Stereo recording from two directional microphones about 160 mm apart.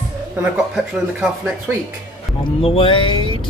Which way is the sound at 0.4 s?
5° right (ahead or behind).